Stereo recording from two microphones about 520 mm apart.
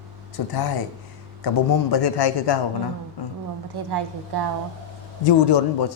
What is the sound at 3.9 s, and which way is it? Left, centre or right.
Speech, right.